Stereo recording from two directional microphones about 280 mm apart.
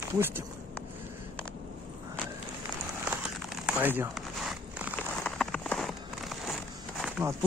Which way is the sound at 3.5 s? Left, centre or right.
Centre.